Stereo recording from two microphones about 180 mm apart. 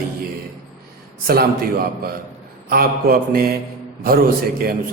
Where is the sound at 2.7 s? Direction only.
55° right (ahead or behind).